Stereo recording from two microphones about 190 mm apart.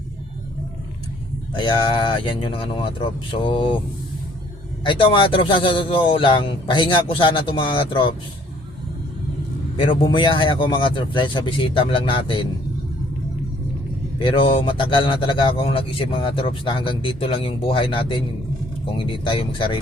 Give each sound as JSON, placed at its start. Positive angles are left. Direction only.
{"t": 1.5, "sound": "a man's voice", "side_deg": 25}
{"t": 4.9, "sound": "a man's voice", "side_deg": 25}
{"t": 9.7, "sound": "a man's voice", "side_deg": 25}
{"t": 14.2, "sound": "a man's voice", "side_deg": 25}